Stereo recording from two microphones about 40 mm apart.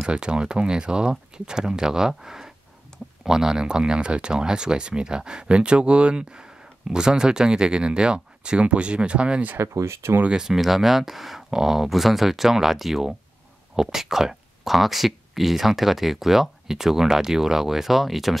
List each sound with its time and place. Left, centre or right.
0.1 s speech: right
9.6 s speech: right
10.3 s speech: centre